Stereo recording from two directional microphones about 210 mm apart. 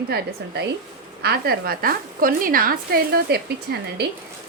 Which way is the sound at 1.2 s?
50° right (ahead or behind).